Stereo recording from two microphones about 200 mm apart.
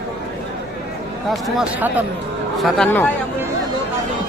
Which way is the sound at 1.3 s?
Centre (ahead or behind).